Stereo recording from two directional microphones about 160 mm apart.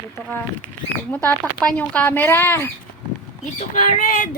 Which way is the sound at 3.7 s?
50° left (ahead or behind).